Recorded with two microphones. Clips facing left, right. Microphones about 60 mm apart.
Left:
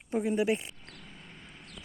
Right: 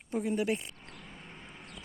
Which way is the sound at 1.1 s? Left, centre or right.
Right.